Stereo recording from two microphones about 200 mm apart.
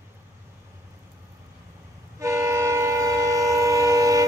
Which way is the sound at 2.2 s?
15° right (ahead or behind).